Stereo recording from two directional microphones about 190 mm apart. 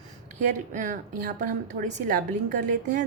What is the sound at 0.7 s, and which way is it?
A woman's voice, 40° right (ahead or behind).